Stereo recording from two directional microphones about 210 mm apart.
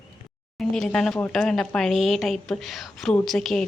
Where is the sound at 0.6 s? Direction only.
Centre (ahead or behind).